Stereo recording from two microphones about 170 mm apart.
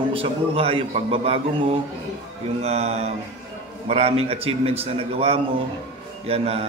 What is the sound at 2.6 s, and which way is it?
A man's voice, 40° right (ahead or behind).